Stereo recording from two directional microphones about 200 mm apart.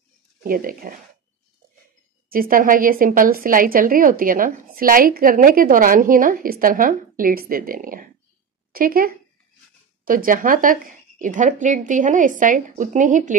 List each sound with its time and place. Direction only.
0.4 s a woman's voice: 45° right (ahead or behind)
2.2 s a woman's voice: 45° right (ahead or behind)